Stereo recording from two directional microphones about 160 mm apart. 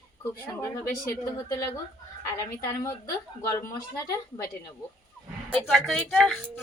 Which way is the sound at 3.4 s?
20° left (ahead or behind).